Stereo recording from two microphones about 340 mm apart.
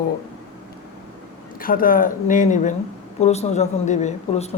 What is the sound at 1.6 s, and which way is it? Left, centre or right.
Speech, left.